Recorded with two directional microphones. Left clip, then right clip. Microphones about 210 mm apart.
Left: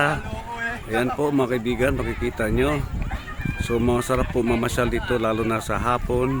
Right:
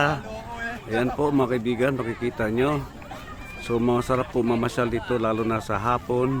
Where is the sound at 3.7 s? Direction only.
5° left (ahead or behind).